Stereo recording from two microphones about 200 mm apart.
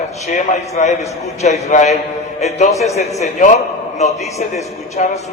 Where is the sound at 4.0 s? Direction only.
35° left (ahead or behind).